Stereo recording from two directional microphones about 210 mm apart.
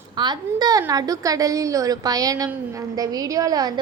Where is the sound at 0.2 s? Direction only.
20° right (ahead or behind).